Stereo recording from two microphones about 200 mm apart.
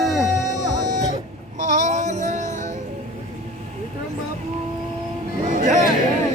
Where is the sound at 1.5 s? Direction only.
35° right (ahead or behind).